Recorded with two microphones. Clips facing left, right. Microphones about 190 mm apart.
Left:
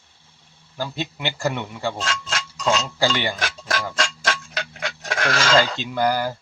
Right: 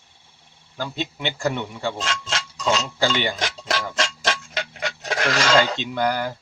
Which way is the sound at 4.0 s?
20° right (ahead or behind).